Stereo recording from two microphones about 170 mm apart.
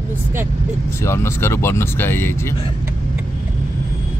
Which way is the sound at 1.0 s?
15° left (ahead or behind).